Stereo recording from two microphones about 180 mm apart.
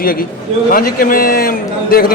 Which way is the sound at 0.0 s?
55° left (ahead or behind).